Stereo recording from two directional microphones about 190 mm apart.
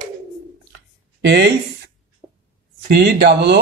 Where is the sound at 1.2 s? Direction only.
65° right (ahead or behind).